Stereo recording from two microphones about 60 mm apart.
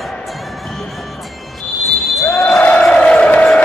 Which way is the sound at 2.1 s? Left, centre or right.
Centre.